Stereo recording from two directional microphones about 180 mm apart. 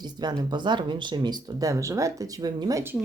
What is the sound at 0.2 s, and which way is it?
Speech, 25° right (ahead or behind).